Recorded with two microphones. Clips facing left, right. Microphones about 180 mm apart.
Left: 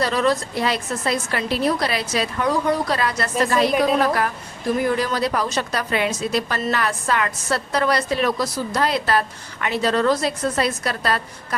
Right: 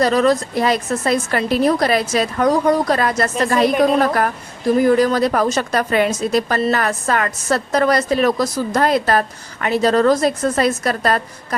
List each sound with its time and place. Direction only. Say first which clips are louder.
0.0 s a woman's voice: right 5 dB; 45° right (ahead or behind)